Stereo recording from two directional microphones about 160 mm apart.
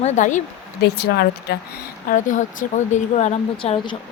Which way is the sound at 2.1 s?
55° left (ahead or behind).